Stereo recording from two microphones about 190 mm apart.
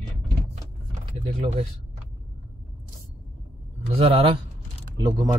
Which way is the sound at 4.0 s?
30° right (ahead or behind).